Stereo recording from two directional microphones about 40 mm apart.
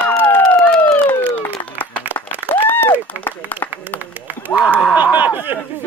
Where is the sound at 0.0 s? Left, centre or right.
Left.